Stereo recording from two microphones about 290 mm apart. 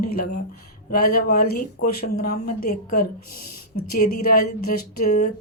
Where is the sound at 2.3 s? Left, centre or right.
Left.